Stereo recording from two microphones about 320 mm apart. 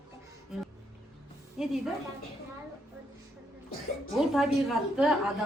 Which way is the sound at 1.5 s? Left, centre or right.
Centre.